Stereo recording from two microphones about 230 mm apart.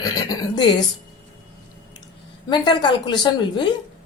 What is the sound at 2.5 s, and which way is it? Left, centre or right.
Speech, centre.